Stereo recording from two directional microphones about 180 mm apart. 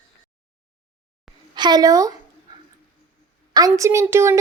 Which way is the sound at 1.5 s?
25° right (ahead or behind).